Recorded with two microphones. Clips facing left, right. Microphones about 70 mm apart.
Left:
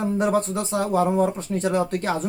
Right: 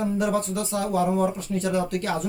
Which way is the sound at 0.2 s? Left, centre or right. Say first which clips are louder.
Left 3 dB; left.